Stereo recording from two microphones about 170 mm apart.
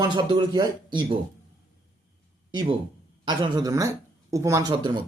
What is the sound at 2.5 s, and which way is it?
Speech, 25° right (ahead or behind).